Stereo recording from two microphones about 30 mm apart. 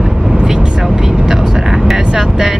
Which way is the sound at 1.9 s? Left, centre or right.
Right.